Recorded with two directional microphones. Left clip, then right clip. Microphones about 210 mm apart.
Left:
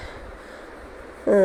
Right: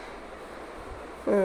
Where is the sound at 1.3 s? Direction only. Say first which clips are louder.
Left 7 dB; 15° left (ahead or behind).